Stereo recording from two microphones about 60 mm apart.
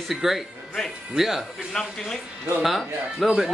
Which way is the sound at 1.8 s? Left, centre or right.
Centre.